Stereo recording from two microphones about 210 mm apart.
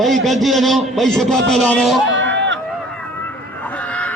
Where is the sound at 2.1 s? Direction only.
60° right (ahead or behind).